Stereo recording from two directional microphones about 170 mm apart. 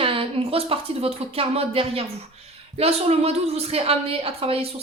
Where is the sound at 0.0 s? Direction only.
30° right (ahead or behind).